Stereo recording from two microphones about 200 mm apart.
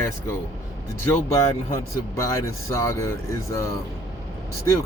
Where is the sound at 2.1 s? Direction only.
15° left (ahead or behind).